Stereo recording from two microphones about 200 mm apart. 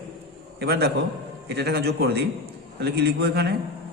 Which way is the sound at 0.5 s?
55° right (ahead or behind).